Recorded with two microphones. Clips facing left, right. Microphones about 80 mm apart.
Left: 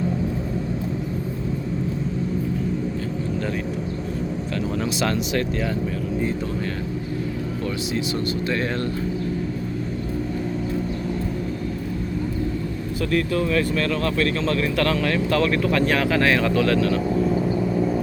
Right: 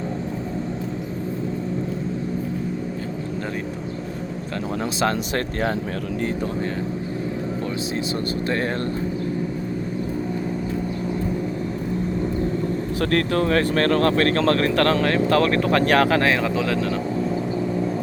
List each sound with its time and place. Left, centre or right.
4.9 s speech: right
13.0 s speech: right
16.2 s speech: right
17.2 s vehicle: centre